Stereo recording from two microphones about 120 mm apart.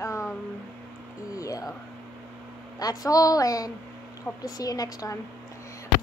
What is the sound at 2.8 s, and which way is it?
A woman's voice, 30° left (ahead or behind).